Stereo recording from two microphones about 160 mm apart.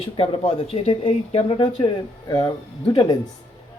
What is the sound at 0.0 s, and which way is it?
Speech, 35° left (ahead or behind).